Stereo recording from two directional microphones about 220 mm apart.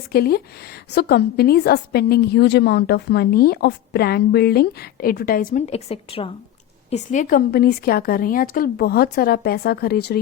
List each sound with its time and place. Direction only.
0.1 s a woman's voice: 45° left (ahead or behind)